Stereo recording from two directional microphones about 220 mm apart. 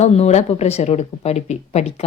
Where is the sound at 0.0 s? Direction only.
30° left (ahead or behind).